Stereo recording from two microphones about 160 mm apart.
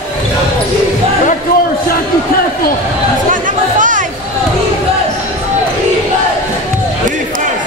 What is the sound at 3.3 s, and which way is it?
Chatter, 55° right (ahead or behind).